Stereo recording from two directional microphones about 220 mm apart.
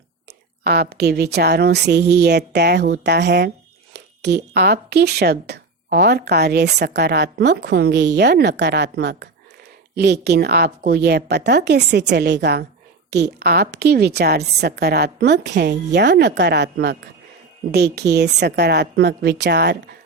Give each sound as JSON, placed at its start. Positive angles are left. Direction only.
{"t": 0.6, "sound": "speech", "side_deg": -45}